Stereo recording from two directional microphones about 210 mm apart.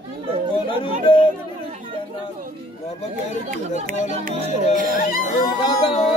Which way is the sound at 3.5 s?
40° right (ahead or behind).